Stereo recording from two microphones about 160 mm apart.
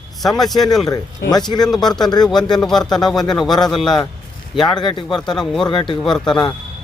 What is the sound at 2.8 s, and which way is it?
Speech, 25° left (ahead or behind).